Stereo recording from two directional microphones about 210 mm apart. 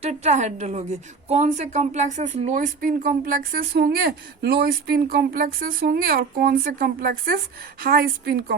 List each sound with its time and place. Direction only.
0.0 s a woman's voice: 30° right (ahead or behind)